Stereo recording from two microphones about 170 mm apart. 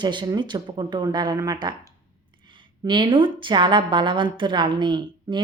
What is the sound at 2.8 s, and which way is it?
A woman's voice, 30° right (ahead or behind).